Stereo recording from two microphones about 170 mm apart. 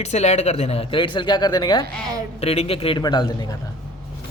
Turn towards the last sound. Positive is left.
turn(degrees=25)  # may be behind; listen again after turning